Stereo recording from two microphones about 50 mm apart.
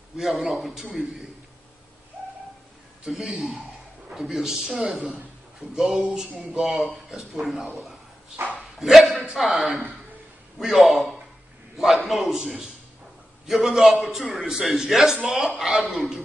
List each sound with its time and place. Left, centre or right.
0.2 s a man's voice: centre
3.1 s a man's voice: centre
8.4 s speech: right
8.7 s a sound: centre
9.2 s a man's voice: centre